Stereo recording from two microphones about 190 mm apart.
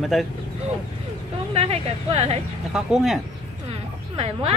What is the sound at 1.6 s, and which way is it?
Speech, 35° right (ahead or behind).